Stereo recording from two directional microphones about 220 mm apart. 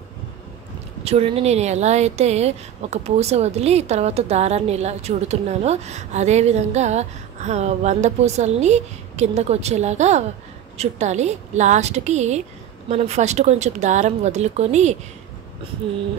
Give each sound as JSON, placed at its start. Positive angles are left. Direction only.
{"t": 1.0, "sound": "speech", "side_deg": -25}